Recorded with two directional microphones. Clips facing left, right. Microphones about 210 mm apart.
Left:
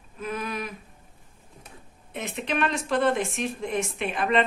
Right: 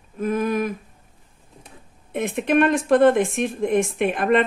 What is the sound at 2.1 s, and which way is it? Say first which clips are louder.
Speech: right 10 dB; 55° right (ahead or behind).